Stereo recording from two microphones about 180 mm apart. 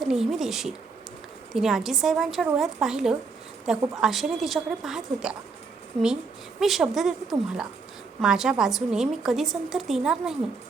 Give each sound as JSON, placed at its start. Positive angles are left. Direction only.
{"t": 0.0, "sound": "a woman's voice", "side_deg": -5}
{"t": 6.6, "sound": "a woman's voice", "side_deg": 0}